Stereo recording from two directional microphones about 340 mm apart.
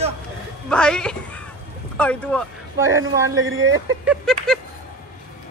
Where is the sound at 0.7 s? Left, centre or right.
Centre.